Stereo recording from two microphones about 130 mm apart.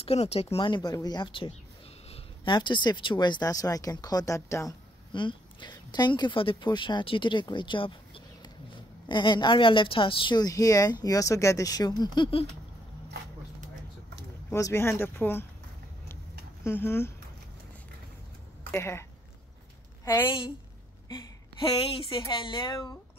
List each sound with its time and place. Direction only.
0.0 s speech: 50° left (ahead or behind); by 4.7 s 25° left (ahead or behind)
5.1 s speech: 35° left (ahead or behind)
14.5 s speech: 20° left (ahead or behind)
16.6 s speech: 20° left (ahead or behind)
18.7 s speech: 20° left (ahead or behind)
20.1 s speech: 20° left (ahead or behind)
21.6 s a woman's voice: 45° left (ahead or behind)